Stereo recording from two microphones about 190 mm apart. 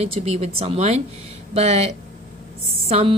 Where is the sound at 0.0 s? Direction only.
35° right (ahead or behind).